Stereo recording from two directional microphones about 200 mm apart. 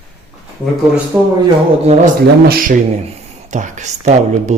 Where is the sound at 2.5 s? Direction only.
45° right (ahead or behind).